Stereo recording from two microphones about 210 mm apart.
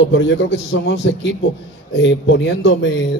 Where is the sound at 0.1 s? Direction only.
60° left (ahead or behind).